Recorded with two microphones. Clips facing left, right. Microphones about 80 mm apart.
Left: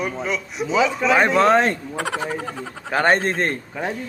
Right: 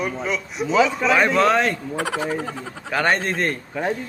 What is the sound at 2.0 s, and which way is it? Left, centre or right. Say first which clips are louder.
Speech: right 1 dB; centre.